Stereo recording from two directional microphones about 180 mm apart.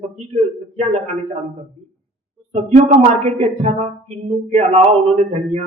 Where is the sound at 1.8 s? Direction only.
40° right (ahead or behind).